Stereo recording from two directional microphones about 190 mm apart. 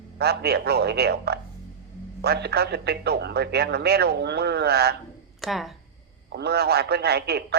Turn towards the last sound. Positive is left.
turn(degrees=-60)  # may be behind; listen again after turning